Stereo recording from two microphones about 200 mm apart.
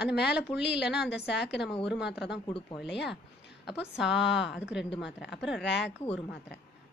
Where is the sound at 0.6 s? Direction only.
55° left (ahead or behind).